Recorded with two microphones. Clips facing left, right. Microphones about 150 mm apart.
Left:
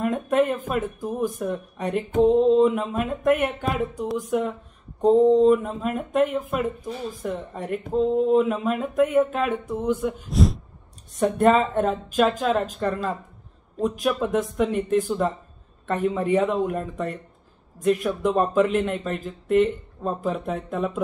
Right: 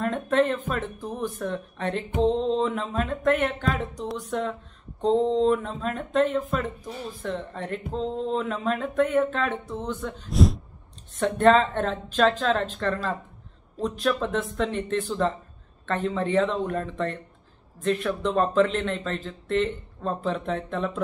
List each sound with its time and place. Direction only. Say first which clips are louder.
0.0 s speech: left 2 dB; 10° left (ahead or behind)
10.3 s a sound: right 1 dB; centre (ahead or behind)
11.1 s speech: left 1 dB; 10° left (ahead or behind)